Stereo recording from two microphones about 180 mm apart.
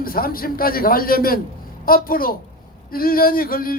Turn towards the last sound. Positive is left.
turn(degrees=55)  # may be behind; listen again after turning